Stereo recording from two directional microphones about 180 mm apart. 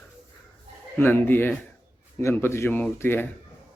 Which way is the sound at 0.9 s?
10° left (ahead or behind).